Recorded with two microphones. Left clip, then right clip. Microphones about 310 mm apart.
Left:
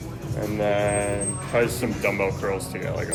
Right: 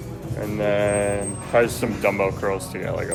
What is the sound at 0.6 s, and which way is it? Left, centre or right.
Speech, centre.